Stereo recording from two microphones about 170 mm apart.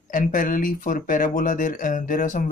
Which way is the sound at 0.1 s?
55° left (ahead or behind).